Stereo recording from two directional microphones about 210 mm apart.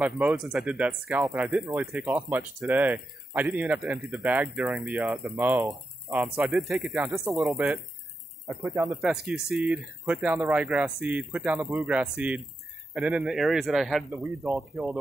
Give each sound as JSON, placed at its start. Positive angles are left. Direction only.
{"t": 0.0, "sound": "speech", "side_deg": -5}
{"t": 9.0, "sound": "speech", "side_deg": 0}